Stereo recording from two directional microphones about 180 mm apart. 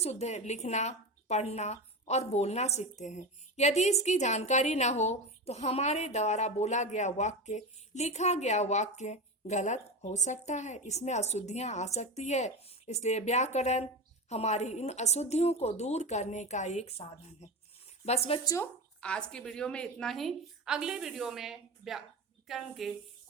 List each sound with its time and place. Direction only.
0.0 s a woman's voice: 35° left (ahead or behind)
18.0 s a woman's voice: 35° left (ahead or behind)
18.4 s a woman's voice: 15° left (ahead or behind)